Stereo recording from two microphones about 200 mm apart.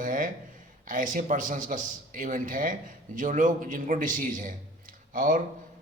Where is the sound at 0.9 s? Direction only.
40° right (ahead or behind).